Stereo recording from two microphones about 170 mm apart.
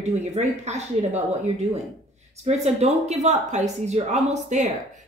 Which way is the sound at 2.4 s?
40° right (ahead or behind).